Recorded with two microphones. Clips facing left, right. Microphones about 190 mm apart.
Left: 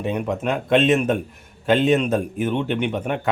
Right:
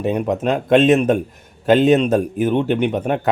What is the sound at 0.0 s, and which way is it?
A man's voice, 40° right (ahead or behind).